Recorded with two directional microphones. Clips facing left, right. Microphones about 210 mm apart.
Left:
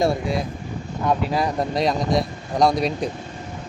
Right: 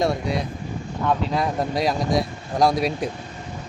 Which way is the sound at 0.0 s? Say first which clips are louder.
Left 1 dB; centre (ahead or behind).